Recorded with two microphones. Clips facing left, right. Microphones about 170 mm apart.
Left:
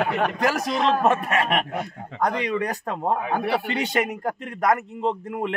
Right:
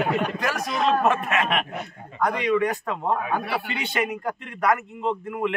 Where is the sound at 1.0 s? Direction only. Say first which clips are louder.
Left 1 dB; 35° left (ahead or behind).